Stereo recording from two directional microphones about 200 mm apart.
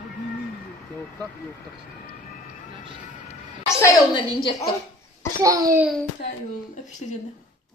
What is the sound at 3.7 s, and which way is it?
Speech, 20° left (ahead or behind).